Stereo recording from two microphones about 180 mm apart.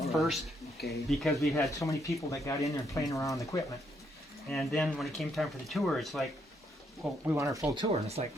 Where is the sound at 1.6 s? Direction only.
20° left (ahead or behind).